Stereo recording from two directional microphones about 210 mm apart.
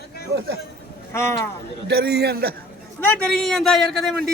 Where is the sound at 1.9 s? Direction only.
50° right (ahead or behind).